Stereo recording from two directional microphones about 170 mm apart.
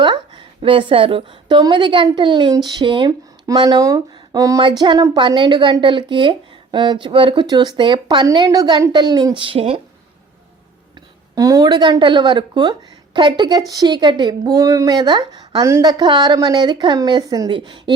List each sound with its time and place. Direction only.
0.0 s a woman's voice: 30° right (ahead or behind)
11.3 s a woman's voice: 20° right (ahead or behind)